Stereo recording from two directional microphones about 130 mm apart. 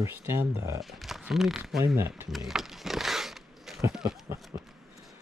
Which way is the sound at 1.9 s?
15° right (ahead or behind).